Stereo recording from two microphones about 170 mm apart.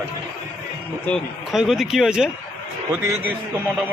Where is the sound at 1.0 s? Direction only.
Centre (ahead or behind).